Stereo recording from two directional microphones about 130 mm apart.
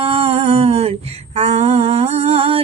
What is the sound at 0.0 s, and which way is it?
Humming, 45° right (ahead or behind).